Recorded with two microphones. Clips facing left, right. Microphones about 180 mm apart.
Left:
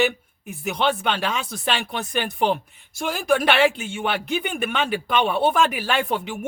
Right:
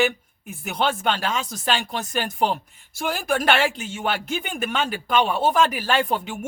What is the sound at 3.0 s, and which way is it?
Speech, 55° right (ahead or behind).